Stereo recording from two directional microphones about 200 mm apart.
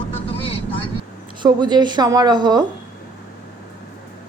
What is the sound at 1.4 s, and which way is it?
Speech, 20° right (ahead or behind).